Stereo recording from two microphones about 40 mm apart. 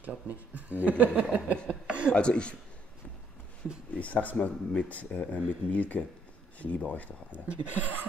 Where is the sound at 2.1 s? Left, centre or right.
Left.